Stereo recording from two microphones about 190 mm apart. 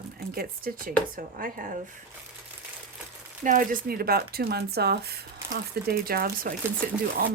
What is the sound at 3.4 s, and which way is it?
A woman's voice, 45° right (ahead or behind).